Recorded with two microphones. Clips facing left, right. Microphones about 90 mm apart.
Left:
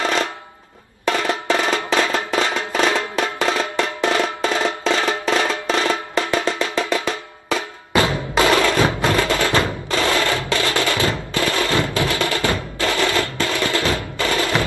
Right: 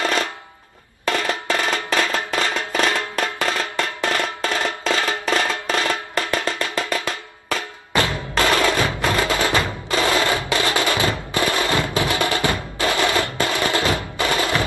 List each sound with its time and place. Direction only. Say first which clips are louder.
0.0 s music: left 1 dB; centre (ahead or behind)
9.1 s music: left 1 dB; 15° right (ahead or behind)
9.8 s percussion: even; 15° right (ahead or behind)
11.3 s music: even; 20° right (ahead or behind)